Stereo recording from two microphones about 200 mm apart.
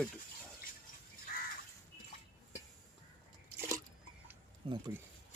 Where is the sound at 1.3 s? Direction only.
45° left (ahead or behind).